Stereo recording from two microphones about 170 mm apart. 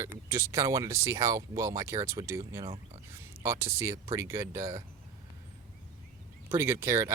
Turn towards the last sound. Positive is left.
turn(degrees=-15)  # may be behind; listen again after turning